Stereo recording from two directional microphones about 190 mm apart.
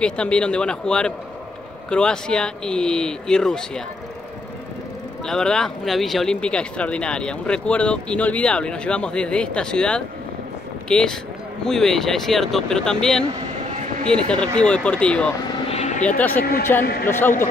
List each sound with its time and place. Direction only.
0.0 s speech: 5° left (ahead or behind)
5.2 s speech: 5° left (ahead or behind)
15.7 s vehicle: 40° left (ahead or behind)
16.2 s speech: 10° left (ahead or behind)